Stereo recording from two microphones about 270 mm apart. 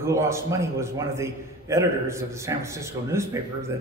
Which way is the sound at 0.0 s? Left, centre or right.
Centre.